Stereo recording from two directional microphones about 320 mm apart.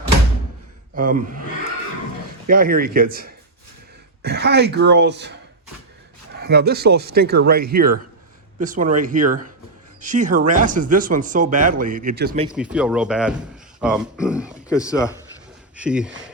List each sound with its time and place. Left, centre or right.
0.9 s speech: right
2.5 s speech: right
6.3 s speech: right
12.7 s speech: centre
14.8 s a man's voice: centre
15.7 s speech: centre